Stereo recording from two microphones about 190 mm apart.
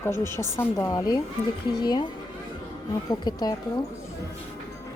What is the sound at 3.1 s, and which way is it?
Speech, 20° left (ahead or behind).